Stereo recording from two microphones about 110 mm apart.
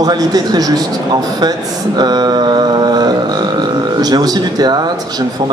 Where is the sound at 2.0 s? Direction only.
40° right (ahead or behind).